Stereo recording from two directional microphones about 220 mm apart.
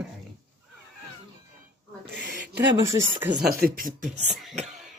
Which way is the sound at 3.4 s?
40° right (ahead or behind).